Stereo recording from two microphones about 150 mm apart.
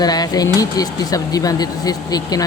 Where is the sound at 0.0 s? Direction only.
25° left (ahead or behind).